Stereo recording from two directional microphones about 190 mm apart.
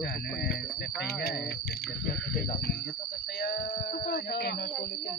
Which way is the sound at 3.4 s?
55° left (ahead or behind).